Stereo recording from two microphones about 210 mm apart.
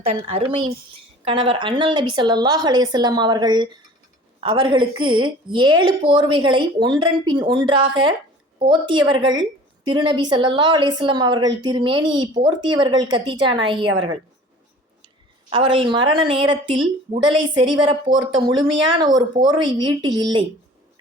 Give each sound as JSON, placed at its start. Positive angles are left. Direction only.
{"t": 0.0, "sound": "a woman's voice", "side_deg": -30}
{"t": 15.4, "sound": "a woman's voice", "side_deg": -25}